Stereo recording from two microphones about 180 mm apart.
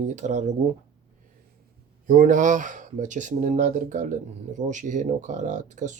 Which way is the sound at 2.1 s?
45° right (ahead or behind).